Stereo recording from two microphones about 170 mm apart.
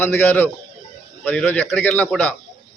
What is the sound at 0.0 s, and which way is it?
A man's voice, 10° left (ahead or behind).